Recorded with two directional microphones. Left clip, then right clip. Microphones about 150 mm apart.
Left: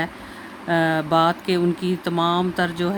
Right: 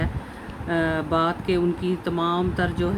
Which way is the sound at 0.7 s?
70° left (ahead or behind).